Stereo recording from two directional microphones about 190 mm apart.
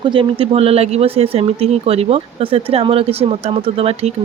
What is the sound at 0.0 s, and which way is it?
Speech, 25° right (ahead or behind).